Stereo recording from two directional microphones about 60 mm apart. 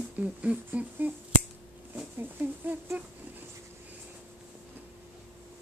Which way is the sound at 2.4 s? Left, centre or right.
Right.